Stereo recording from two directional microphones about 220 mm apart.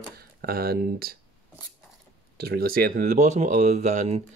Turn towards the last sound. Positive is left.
turn(degrees=-30)  # may be behind; listen again after turning